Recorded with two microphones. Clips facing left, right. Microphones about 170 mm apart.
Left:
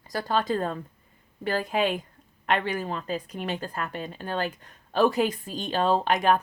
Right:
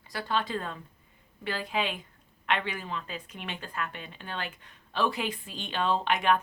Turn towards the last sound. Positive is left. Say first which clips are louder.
# left 4 dB
turn(degrees=40)  # may be behind; listen again after turning